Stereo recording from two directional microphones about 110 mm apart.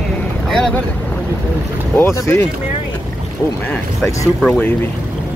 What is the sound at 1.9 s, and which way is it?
Speech, 25° left (ahead or behind).